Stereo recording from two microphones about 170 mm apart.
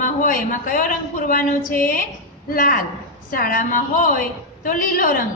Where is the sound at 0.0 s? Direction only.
50° left (ahead or behind).